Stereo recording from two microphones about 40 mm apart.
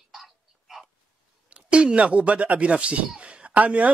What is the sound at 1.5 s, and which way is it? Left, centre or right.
A man's voice, right.